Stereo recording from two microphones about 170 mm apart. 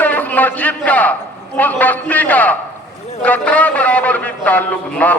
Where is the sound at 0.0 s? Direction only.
10° left (ahead or behind).